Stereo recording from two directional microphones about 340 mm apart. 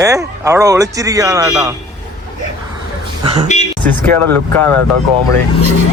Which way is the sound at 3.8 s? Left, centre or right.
Centre.